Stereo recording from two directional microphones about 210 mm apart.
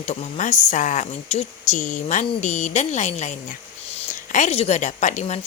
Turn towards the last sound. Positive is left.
turn(degrees=35)  # may be behind; listen again after turning